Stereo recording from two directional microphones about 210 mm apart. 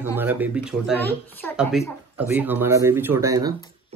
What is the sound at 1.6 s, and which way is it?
Speech, 5° right (ahead or behind).